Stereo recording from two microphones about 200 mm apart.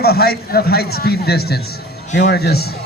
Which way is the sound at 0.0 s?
50° left (ahead or behind).